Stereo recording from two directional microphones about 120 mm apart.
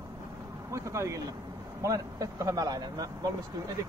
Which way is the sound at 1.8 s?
30° right (ahead or behind).